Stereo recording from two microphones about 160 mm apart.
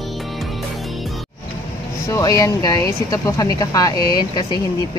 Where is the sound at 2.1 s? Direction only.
20° left (ahead or behind).